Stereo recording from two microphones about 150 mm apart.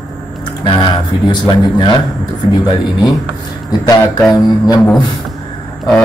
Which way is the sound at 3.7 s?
25° left (ahead or behind).